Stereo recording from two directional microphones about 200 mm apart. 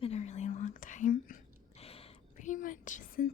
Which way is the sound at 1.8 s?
30° left (ahead or behind).